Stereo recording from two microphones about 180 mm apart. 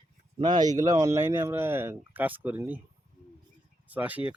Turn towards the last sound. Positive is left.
turn(degrees=-10)  # may be behind; listen again after turning